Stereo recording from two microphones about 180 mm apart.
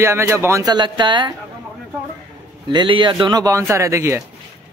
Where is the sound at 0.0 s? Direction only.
15° right (ahead or behind).